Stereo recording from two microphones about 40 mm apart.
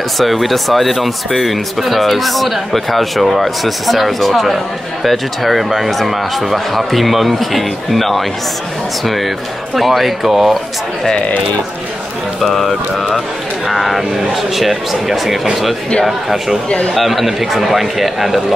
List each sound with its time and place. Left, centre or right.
0.2 s speech: centre
12.4 s speech: centre
16.6 s speech: left
16.9 s speech: centre